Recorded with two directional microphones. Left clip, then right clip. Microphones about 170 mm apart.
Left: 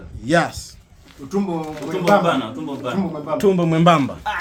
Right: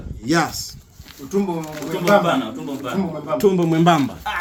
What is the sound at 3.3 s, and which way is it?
Speech, 35° left (ahead or behind).